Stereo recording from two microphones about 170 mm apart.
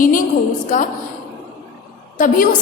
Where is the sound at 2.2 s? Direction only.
55° left (ahead or behind).